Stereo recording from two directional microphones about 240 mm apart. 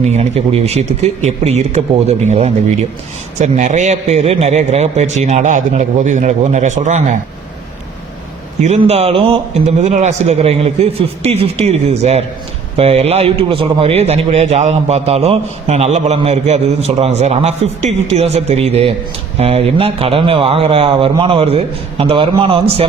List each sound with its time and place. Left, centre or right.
0.2 s a man's voice: right
8.6 s a man's voice: right